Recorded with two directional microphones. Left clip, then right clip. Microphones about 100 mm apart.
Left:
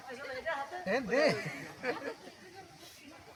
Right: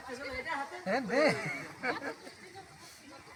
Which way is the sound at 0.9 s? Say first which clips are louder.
Right 1 dB; 40° right (ahead or behind).